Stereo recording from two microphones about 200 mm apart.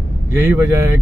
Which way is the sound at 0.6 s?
15° right (ahead or behind).